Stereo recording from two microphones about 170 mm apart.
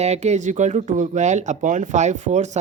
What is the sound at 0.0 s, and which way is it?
Speech, 40° right (ahead or behind).